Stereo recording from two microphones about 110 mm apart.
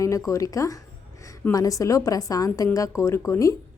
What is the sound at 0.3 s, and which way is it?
A woman's voice, 30° left (ahead or behind).